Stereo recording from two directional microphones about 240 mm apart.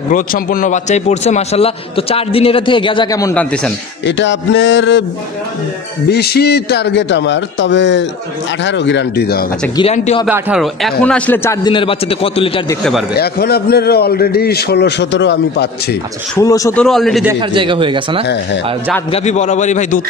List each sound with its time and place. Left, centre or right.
0.1 s a man's voice: left; by 3.7 s centre
4.0 s a man's voice: left
6.0 s a man's voice: left
9.8 s a man's voice: left
10.2 s a man's voice: centre
11.7 s a man's voice: left
13.1 s a man's voice: left
16.3 s speech: centre
16.8 s a man's voice: centre
17.3 s speech: centre
18.2 s a man's voice: left
19.1 s a man's voice: left